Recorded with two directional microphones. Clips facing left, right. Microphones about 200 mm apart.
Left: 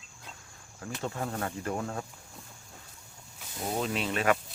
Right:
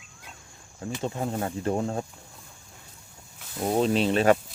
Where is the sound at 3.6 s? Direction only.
30° right (ahead or behind).